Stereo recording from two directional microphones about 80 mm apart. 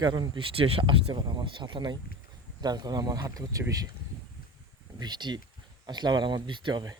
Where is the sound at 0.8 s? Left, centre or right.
Right.